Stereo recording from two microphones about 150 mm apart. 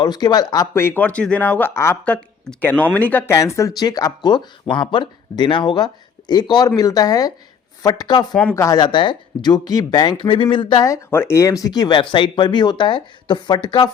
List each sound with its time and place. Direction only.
0.0 s speech: 30° left (ahead or behind)
8.4 s speech: 10° left (ahead or behind)
8.6 s speech: 30° left (ahead or behind)